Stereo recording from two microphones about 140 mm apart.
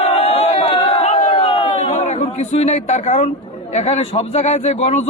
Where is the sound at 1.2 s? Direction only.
40° left (ahead or behind).